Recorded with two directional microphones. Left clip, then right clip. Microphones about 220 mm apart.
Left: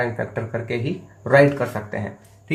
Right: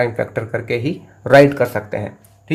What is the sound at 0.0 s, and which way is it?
Speech, 50° right (ahead or behind).